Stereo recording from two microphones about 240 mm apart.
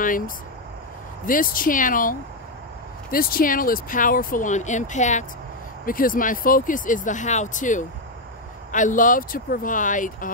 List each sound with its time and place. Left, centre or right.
1.2 s speech: left